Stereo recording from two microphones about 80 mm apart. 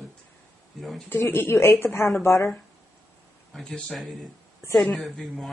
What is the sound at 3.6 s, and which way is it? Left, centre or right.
Speech, centre.